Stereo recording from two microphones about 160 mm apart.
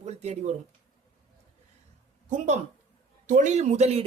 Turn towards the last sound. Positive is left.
turn(degrees=-45)  # may be behind; listen again after turning